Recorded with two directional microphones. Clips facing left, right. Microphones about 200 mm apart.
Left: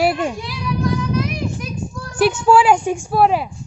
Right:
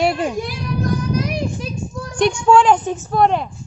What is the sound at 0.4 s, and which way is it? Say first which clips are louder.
Child singing: even; 45° right (ahead or behind).